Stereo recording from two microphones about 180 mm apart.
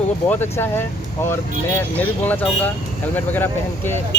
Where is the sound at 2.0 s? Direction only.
10° left (ahead or behind).